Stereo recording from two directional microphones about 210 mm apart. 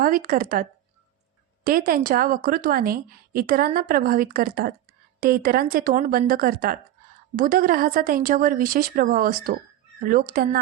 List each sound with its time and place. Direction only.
0.0 s a woman's voice: 40° right (ahead or behind)